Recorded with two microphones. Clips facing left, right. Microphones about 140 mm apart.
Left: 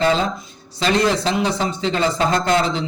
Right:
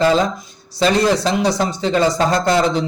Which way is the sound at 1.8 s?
40° right (ahead or behind).